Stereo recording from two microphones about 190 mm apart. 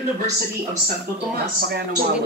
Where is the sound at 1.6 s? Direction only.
55° right (ahead or behind).